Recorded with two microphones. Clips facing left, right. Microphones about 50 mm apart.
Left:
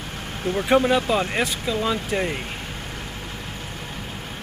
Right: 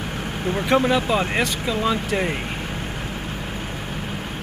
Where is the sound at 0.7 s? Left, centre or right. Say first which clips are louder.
Even; centre.